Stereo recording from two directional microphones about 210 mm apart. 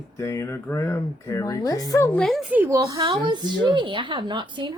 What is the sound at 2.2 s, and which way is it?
A woman's voice, centre (ahead or behind).